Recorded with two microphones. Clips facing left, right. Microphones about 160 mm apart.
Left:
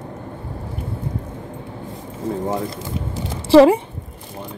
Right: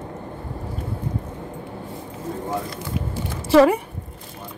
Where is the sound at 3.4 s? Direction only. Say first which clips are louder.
Left 4 dB; 30° left (ahead or behind).